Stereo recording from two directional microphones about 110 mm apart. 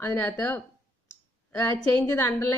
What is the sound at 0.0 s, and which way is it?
Speech, 25° left (ahead or behind).